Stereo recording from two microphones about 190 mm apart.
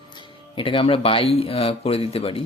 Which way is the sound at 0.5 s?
25° left (ahead or behind).